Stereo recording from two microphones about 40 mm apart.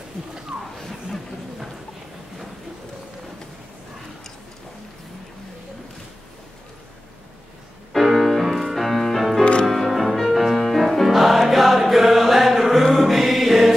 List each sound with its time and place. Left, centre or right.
0.7 s a sound: centre
7.9 s music: centre
9.4 s music: left
9.7 s music: centre